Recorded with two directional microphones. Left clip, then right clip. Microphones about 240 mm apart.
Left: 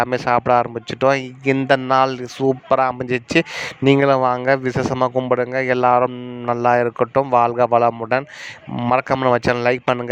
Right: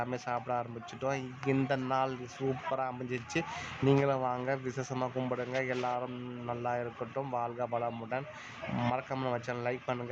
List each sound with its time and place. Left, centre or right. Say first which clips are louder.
0.0 s speech: left 18 dB; left